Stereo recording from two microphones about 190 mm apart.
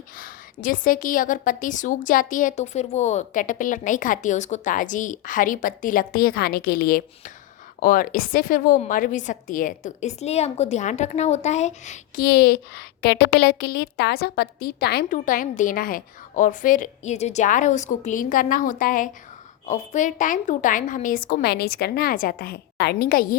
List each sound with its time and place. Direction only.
0.2 s a woman's voice: 45° left (ahead or behind)
12.2 s a woman's voice: 55° left (ahead or behind)